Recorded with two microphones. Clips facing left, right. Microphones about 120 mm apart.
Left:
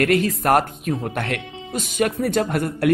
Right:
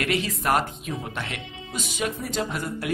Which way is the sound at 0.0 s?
50° left (ahead or behind).